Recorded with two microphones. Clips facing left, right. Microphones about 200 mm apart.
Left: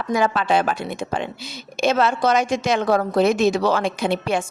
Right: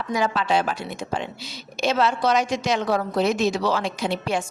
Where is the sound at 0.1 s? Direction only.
55° left (ahead or behind).